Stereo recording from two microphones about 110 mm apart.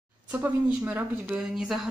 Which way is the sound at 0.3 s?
15° right (ahead or behind).